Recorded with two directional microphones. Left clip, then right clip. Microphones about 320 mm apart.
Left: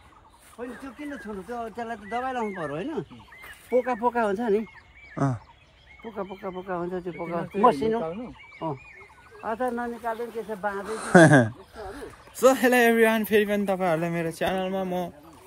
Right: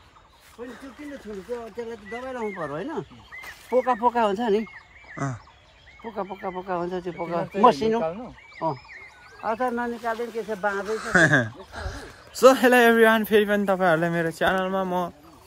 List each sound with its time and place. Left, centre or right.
1.9 s speech: centre
2.6 s speech: centre
3.7 s speech: right
5.1 s turkey: centre
6.0 s speech: right
10.9 s speech: centre
11.7 s speech: right
12.4 s speech: centre